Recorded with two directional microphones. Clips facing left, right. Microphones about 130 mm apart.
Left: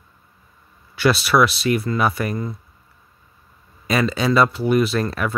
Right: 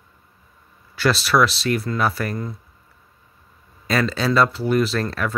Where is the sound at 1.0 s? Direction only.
10° left (ahead or behind).